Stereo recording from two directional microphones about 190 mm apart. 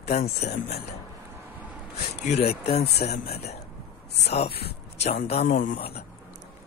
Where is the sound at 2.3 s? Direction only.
35° left (ahead or behind).